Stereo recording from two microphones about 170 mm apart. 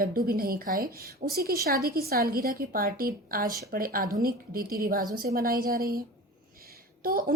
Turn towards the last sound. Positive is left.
turn(degrees=-55)  # may be behind; listen again after turning